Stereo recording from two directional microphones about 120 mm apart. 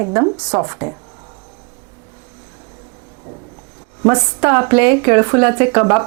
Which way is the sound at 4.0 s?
25° right (ahead or behind).